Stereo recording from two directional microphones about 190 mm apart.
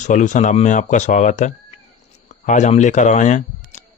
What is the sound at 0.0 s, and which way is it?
A man's voice, 40° left (ahead or behind).